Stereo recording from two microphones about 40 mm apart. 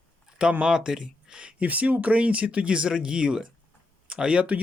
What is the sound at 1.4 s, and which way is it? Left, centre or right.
Speech, right.